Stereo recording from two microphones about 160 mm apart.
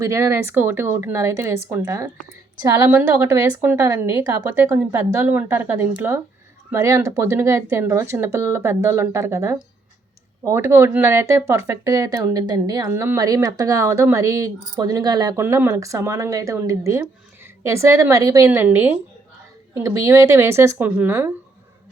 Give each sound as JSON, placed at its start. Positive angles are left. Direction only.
{"t": 0.0, "sound": "a woman's voice", "side_deg": -20}